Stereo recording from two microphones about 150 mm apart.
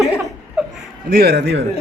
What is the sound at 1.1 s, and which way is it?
Speech, 90° right.